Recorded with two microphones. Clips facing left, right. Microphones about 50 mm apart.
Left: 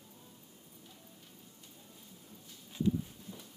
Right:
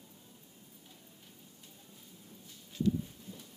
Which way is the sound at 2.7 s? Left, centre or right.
Centre.